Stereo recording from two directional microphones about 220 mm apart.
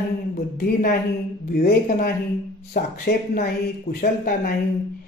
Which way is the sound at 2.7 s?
40° left (ahead or behind).